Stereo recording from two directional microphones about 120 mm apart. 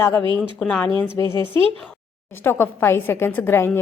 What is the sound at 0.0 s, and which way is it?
Speech, 20° left (ahead or behind).